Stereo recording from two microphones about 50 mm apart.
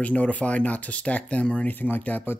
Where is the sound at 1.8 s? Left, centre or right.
Left.